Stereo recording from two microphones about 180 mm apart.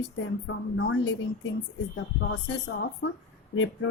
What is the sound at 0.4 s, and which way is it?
Speech, 90° left.